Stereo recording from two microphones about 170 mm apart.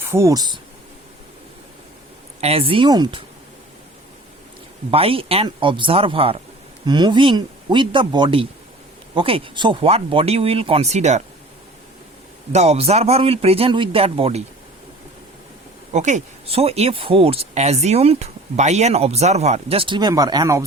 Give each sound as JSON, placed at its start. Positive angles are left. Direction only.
{"t": 0.0, "sound": "speech", "side_deg": -15}
{"t": 2.4, "sound": "speech", "side_deg": -35}
{"t": 4.9, "sound": "speech", "side_deg": -35}
{"t": 12.5, "sound": "speech", "side_deg": -40}
{"t": 15.9, "sound": "speech", "side_deg": -45}